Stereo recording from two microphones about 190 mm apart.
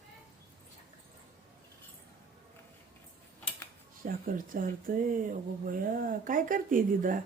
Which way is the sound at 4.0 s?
45° right (ahead or behind).